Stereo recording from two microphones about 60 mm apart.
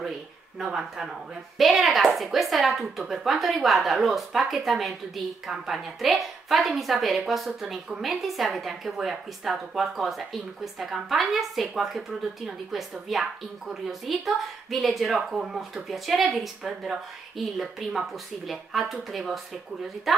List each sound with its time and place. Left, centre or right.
0.7 s a woman's voice: centre